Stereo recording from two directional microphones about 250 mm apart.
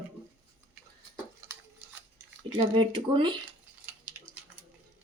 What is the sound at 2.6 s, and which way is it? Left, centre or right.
Speech, centre.